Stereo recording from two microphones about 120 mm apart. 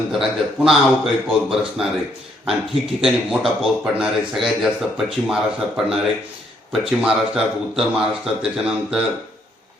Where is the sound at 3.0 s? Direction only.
Centre (ahead or behind).